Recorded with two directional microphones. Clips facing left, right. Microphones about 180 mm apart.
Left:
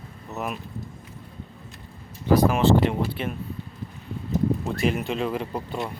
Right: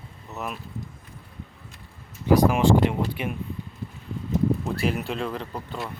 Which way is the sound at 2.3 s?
15° right (ahead or behind).